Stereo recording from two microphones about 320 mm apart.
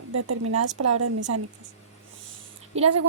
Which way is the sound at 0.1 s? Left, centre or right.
Right.